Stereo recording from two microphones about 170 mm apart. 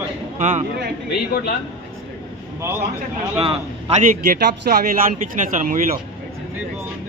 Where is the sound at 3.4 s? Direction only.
35° right (ahead or behind).